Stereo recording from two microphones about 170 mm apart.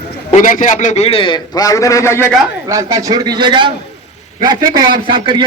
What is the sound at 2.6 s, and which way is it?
A man's voice, 20° right (ahead or behind).